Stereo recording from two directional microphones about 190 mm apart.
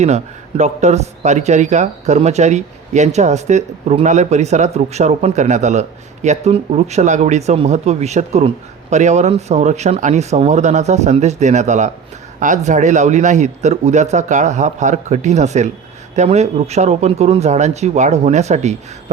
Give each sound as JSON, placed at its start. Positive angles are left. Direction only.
{"t": 0.0, "sound": "a man's voice", "side_deg": -35}